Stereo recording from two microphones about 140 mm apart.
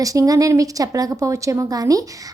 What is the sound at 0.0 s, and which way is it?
A woman's voice, 25° right (ahead or behind).